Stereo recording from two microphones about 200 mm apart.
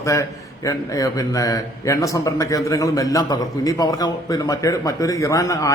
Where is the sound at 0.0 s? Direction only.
15° left (ahead or behind).